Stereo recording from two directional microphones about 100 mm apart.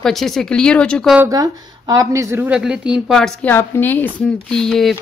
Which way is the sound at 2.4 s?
10° right (ahead or behind).